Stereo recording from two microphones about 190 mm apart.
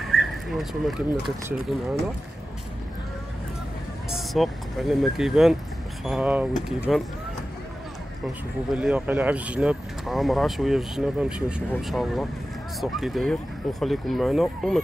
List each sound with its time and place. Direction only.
0.1 s a sound: centre (ahead or behind)
4.1 s speech: centre (ahead or behind)
8.7 s speech: 5° right (ahead or behind)